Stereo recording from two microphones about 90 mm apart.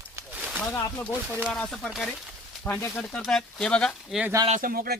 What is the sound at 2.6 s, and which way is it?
Speech, 25° left (ahead or behind).